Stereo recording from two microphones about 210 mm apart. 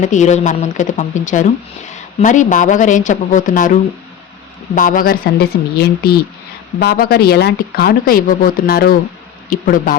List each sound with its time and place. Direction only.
0.0 s a woman's voice: 35° left (ahead or behind)
4.7 s speech: 40° left (ahead or behind)